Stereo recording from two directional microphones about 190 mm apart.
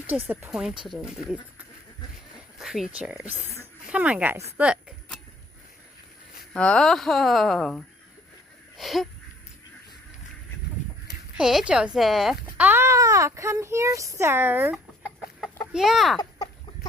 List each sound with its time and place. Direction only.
0.3 s speech: 10° right (ahead or behind)
6.5 s speech: 5° left (ahead or behind)
8.8 s wheeze: centre (ahead or behind)
11.3 s speech: 5° right (ahead or behind)